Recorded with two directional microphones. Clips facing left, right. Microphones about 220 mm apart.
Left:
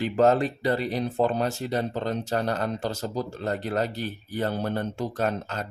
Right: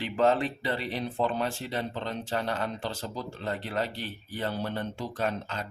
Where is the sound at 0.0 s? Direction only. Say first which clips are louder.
Left 4 dB; 45° left (ahead or behind).